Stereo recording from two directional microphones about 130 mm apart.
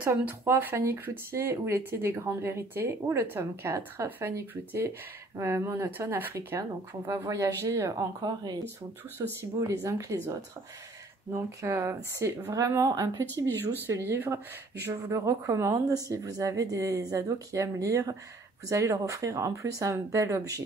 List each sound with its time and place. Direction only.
0.0 s speech: 15° right (ahead or behind)